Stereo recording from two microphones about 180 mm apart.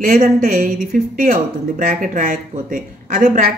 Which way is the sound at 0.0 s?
55° right (ahead or behind).